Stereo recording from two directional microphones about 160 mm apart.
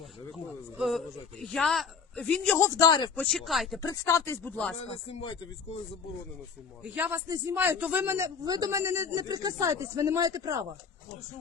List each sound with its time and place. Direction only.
0.8 s a man's voice: centre (ahead or behind)
2.6 s a man's voice: 20° left (ahead or behind)
3.2 s a man's voice: centre (ahead or behind)
3.8 s speech: 20° left (ahead or behind)
6.9 s a man's voice: 10° right (ahead or behind)